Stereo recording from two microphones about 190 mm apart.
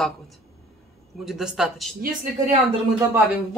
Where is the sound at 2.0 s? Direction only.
45° right (ahead or behind).